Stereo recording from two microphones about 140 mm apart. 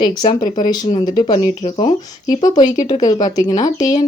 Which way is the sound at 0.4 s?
75° left (ahead or behind).